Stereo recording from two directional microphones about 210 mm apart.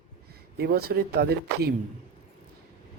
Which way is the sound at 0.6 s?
50° right (ahead or behind).